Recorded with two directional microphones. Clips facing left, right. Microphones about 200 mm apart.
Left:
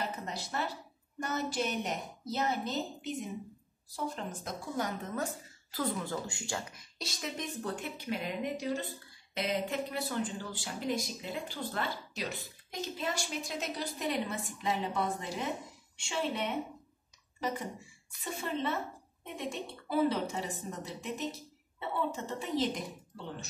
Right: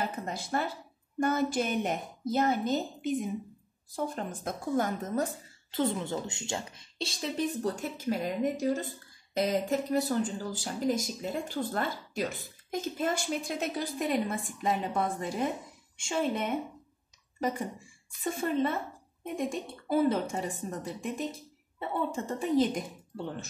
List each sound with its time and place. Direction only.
0.3 s a woman's voice: 50° right (ahead or behind)
5.7 s a woman's voice: 25° right (ahead or behind); by 16.5 s 45° right (ahead or behind)
18.2 s a woman's voice: 50° right (ahead or behind)